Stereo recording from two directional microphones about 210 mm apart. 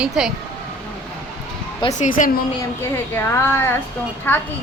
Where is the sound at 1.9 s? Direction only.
35° left (ahead or behind).